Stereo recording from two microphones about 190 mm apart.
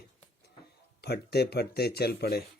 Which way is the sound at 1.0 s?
60° left (ahead or behind).